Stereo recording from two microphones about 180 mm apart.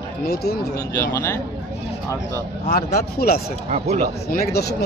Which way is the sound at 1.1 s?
15° left (ahead or behind).